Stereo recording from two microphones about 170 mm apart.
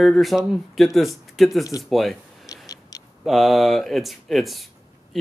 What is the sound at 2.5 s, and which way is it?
Tick-tock, 20° left (ahead or behind).